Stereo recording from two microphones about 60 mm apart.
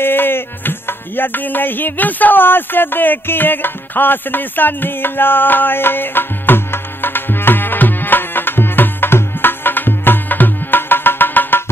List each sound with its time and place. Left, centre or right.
0.0 s music: left